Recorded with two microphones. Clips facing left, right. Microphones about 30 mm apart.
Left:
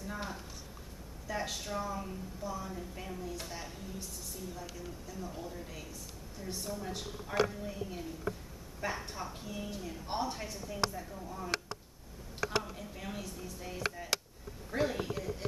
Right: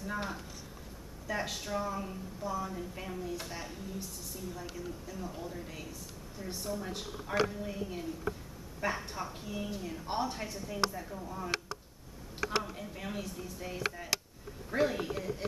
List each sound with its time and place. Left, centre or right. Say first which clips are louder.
0.0 s a sound: right 3 dB; centre
1.2 s a woman's voice: right 2 dB; centre
12.6 s a woman's voice: right 2 dB; centre